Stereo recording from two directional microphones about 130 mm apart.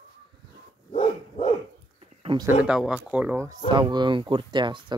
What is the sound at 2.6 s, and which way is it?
Speech, 5° right (ahead or behind).